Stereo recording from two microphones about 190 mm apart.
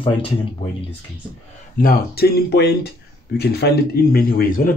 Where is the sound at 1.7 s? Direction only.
50° left (ahead or behind).